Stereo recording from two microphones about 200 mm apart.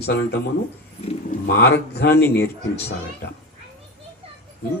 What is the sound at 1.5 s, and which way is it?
Speech, 55° left (ahead or behind).